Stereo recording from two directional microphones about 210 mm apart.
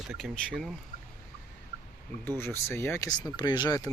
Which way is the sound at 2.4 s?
10° left (ahead or behind).